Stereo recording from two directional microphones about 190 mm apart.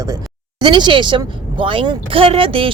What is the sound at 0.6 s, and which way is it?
Speech, 25° right (ahead or behind).